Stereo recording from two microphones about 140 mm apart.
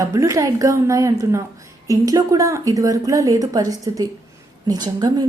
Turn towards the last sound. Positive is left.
turn(degrees=-30)  # may be behind; listen again after turning